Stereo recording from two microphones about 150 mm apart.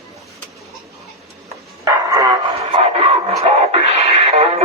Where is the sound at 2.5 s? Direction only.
40° right (ahead or behind).